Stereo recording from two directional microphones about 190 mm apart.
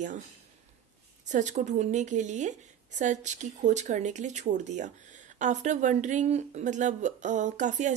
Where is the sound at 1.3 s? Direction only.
40° right (ahead or behind).